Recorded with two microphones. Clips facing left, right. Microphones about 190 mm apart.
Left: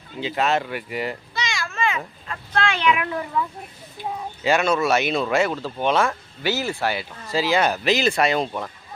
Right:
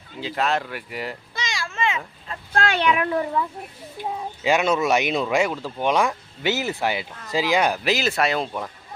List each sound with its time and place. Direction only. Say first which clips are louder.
0.2 s speech: left 2 dB; centre (ahead or behind)
1.3 s children playing: left 3 dB; 50° right (ahead or behind)
1.5 s a sound: right 1 dB; 25° right (ahead or behind)
2.5 s speech: even; 40° right (ahead or behind)
4.4 s a man's voice: even; 15° right (ahead or behind)